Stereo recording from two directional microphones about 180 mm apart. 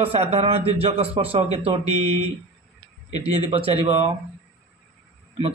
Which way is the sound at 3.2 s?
35° right (ahead or behind).